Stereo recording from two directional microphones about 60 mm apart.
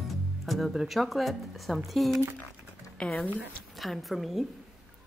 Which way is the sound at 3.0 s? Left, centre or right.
Centre.